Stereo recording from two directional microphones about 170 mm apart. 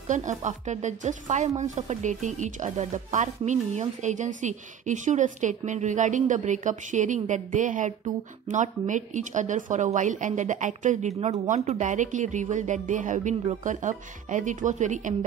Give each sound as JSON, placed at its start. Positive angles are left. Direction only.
{"t": 0.1, "sound": "speech", "side_deg": -45}